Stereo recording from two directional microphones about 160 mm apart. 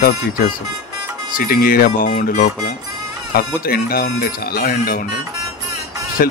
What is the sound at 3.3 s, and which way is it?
Speech, 70° left (ahead or behind).